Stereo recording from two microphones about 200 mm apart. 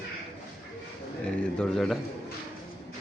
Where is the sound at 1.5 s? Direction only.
Centre (ahead or behind).